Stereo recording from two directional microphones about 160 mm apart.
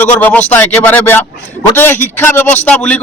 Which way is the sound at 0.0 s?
10° left (ahead or behind).